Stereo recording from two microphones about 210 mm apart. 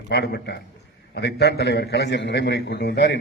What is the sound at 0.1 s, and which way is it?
A man's voice, 50° left (ahead or behind).